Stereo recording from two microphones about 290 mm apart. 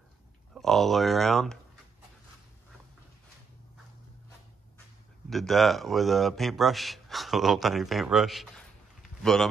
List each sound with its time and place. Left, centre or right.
0.6 s a man's voice: centre
5.3 s a man's voice: centre